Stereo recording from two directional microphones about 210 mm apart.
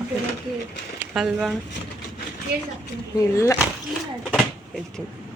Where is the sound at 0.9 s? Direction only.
5° right (ahead or behind).